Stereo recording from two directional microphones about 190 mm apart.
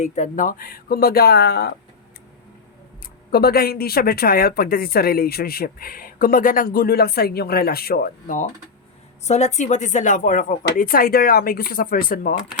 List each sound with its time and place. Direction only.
0.0 s speech: 40° left (ahead or behind); by 1.7 s 60° left (ahead or behind)
3.3 s speech: 55° left (ahead or behind)
9.2 s speech: 35° left (ahead or behind)